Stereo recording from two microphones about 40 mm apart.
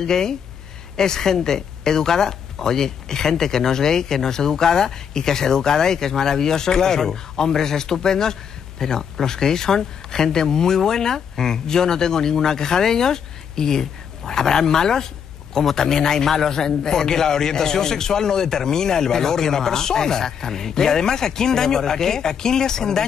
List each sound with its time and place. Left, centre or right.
0.0 s speech: centre